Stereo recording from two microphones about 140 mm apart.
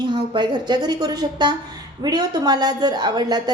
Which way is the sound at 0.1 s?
35° right (ahead or behind).